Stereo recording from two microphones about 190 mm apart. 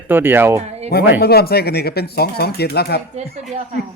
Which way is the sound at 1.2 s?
55° left (ahead or behind).